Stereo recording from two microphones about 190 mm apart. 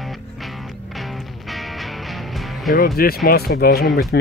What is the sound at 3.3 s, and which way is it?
Speech, 55° left (ahead or behind).